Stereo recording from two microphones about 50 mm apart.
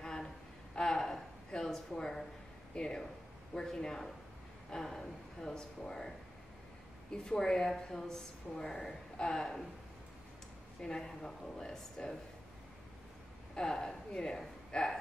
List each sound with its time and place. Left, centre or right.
0.0 s a sound: centre
2.7 s speech: centre
10.8 s speech: centre
13.6 s speech: centre